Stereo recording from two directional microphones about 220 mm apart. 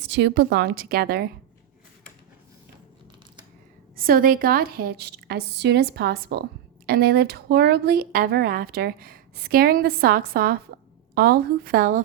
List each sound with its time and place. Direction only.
0.0 s speech: 50° right (ahead or behind)
3.9 s a woman's voice: 40° right (ahead or behind)